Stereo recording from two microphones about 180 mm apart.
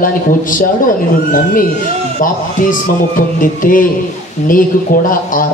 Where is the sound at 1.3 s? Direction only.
50° left (ahead or behind).